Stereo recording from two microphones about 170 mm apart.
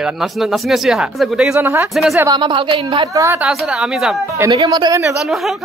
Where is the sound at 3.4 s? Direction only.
Centre (ahead or behind).